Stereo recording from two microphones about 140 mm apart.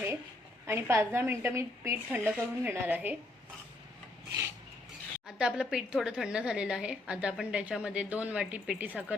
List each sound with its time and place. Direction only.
0.7 s a woman's voice: 20° right (ahead or behind)
5.4 s a woman's voice: 5° right (ahead or behind)